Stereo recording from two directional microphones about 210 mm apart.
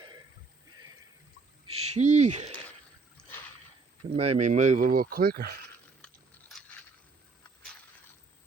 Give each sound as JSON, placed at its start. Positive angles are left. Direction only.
{"t": 1.8, "sound": "speech", "side_deg": -35}
{"t": 4.1, "sound": "speech", "side_deg": -30}